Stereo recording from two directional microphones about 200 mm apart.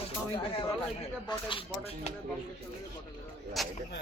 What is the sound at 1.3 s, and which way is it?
Speech, 25° left (ahead or behind).